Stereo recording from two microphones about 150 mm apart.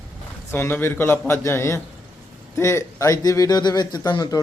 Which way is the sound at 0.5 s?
15° left (ahead or behind).